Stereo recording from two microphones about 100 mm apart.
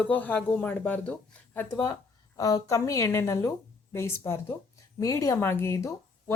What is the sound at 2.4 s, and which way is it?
A woman's voice, 35° left (ahead or behind).